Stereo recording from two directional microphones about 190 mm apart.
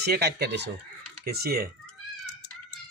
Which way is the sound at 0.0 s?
60° right (ahead or behind).